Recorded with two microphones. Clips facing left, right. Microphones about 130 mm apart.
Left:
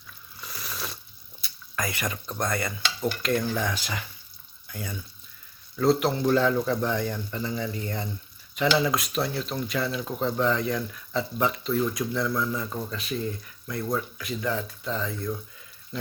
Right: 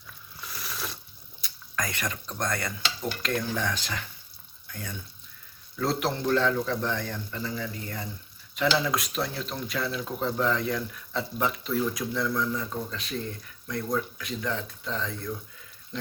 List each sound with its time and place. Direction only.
0.4 s a sound: centre (ahead or behind)
1.4 s speech: 5° left (ahead or behind); by 8.0 s 25° left (ahead or behind)
8.5 s speech: centre (ahead or behind)